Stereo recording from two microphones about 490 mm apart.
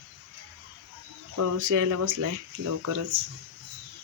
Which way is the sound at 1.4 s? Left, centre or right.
Right.